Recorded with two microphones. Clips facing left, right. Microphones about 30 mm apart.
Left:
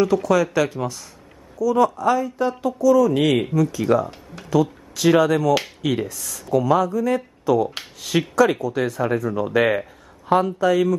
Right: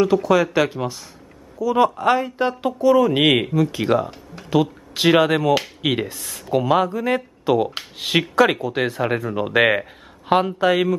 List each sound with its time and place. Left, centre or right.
0.0 s speech: right
1.6 s speech: right
2.0 s speech: right
3.5 s speech: right